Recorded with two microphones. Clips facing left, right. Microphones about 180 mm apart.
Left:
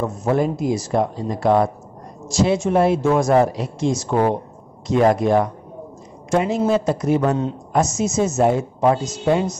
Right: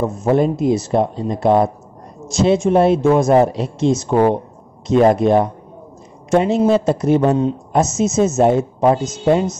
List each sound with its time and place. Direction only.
0.3 s speech: 25° right (ahead or behind)